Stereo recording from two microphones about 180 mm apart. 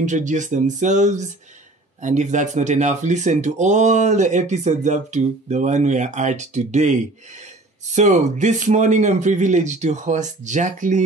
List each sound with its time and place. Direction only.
0.0 s a man's voice: 40° right (ahead or behind)